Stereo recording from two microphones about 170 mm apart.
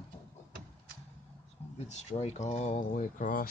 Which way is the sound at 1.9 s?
40° left (ahead or behind).